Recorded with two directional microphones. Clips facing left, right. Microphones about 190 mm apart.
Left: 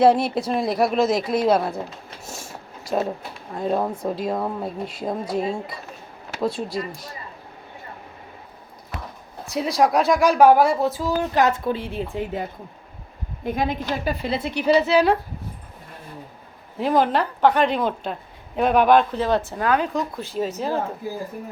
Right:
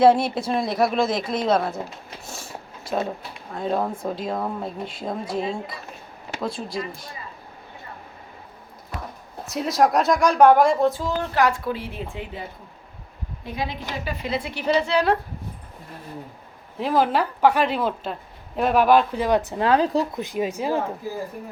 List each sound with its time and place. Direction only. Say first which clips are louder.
0.2 s speech: left 1 dB; 5° left (ahead or behind)
3.5 s speech: left 1 dB; 5° left (ahead or behind)
6.7 s speech: left 2 dB; 35° left (ahead or behind)
9.5 s speech: even; centre (ahead or behind)
11.4 s a woman's voice: left 1 dB; 25° left (ahead or behind)
12.1 s a woman's voice: left 7 dB; 45° left (ahead or behind); by 15.2 s centre (ahead or behind)
16.7 s a woman's voice: left 1 dB; centre (ahead or behind); by 20.1 s 30° right (ahead or behind)
20.1 s a woman's voice: right 1 dB; 15° right (ahead or behind)